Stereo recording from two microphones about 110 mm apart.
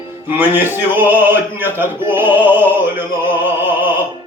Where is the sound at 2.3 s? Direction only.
15° right (ahead or behind).